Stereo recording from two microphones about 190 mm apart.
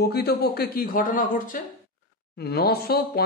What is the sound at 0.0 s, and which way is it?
Speech, 55° left (ahead or behind).